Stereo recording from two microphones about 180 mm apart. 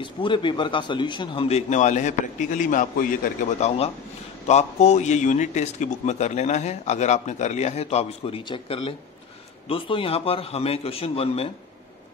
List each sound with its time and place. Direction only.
0.0 s speech: 25° left (ahead or behind)